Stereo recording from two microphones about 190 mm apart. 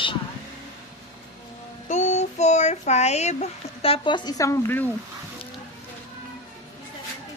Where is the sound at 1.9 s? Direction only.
40° left (ahead or behind); by 4.8 s 15° left (ahead or behind).